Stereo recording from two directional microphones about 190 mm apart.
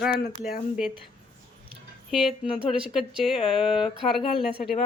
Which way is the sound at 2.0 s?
Centre (ahead or behind).